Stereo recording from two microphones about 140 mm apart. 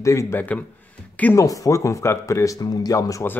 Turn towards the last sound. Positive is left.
turn(degrees=25)  # may be behind; listen again after turning